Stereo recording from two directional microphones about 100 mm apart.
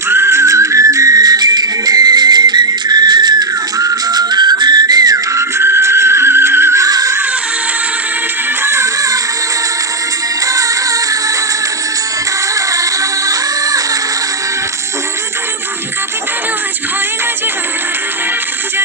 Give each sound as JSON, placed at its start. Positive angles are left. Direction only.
{"t": 0.1, "sound": "music", "side_deg": -25}
{"t": 3.8, "sound": "whistle", "side_deg": -40}
{"t": 6.8, "sound": "music", "side_deg": -35}
{"t": 8.6, "sound": "music", "side_deg": -30}
{"t": 10.4, "sound": "music", "side_deg": -35}
{"t": 12.5, "sound": "music", "side_deg": -35}